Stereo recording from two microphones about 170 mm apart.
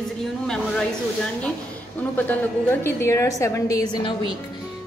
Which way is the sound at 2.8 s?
15° left (ahead or behind).